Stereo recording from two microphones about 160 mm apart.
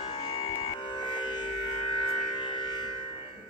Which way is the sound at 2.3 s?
30° left (ahead or behind).